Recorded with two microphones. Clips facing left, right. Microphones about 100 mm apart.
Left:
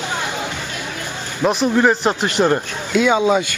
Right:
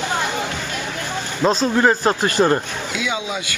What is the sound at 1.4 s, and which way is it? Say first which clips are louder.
Speech: left 1 dB; 10° left (ahead or behind).